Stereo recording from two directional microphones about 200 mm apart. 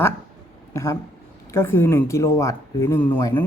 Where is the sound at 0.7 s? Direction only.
15° left (ahead or behind).